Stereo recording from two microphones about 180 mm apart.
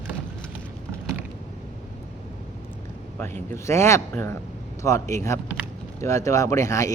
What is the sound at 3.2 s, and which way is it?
Speech, 15° left (ahead or behind).